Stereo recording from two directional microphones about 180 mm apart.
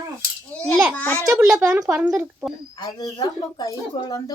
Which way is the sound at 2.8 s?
20° left (ahead or behind).